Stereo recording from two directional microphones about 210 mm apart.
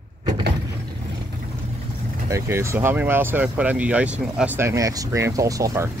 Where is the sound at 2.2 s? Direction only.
15° right (ahead or behind).